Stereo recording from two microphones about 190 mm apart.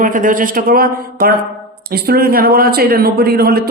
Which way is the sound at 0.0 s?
45° right (ahead or behind).